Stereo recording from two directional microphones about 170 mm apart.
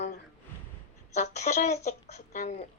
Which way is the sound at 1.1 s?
45° left (ahead or behind).